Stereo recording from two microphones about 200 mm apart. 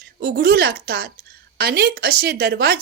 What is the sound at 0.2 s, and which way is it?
A woman's voice, 50° right (ahead or behind).